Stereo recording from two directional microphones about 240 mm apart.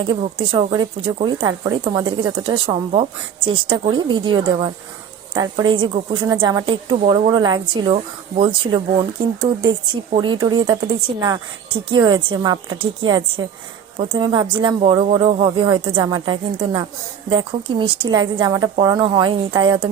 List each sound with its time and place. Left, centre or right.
0.5 s a woman's voice: centre